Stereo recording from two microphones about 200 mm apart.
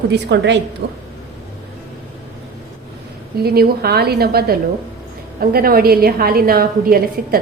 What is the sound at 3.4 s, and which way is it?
A woman's voice, 50° right (ahead or behind).